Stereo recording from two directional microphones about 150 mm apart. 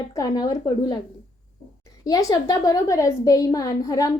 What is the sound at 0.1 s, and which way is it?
Speech, 25° left (ahead or behind).